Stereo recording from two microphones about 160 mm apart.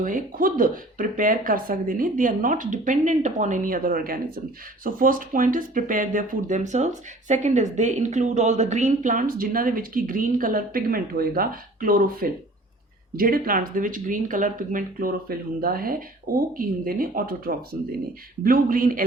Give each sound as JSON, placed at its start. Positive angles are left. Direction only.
{"t": 0.0, "sound": "speech", "side_deg": -60}